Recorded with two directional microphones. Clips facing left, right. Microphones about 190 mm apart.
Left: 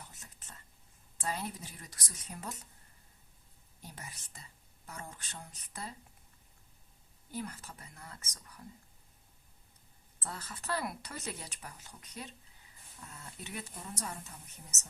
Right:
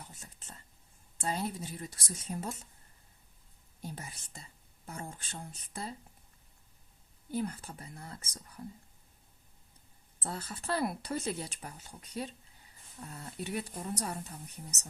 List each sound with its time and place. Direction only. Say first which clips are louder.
0.2 s whispering: right 3 dB; 30° right (ahead or behind)
1.2 s speech: right 4 dB; 25° right (ahead or behind)
3.8 s speech: right 6 dB; 30° right (ahead or behind)
7.3 s speech: right 6 dB; 30° right (ahead or behind)
10.2 s speech: right 4 dB; 30° right (ahead or behind)